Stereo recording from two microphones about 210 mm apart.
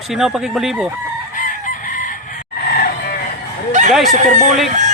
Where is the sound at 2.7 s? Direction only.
45° left (ahead or behind).